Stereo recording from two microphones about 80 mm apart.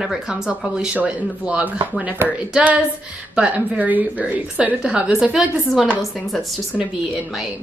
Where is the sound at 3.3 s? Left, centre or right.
Centre.